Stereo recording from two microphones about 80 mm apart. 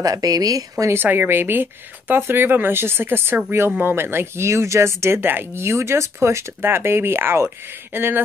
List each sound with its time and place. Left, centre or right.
0.0 s speech: right
0.9 s speech: right